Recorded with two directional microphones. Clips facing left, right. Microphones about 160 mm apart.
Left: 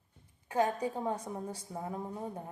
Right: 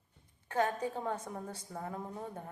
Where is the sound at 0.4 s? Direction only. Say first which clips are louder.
Left 2 dB; 10° left (ahead or behind).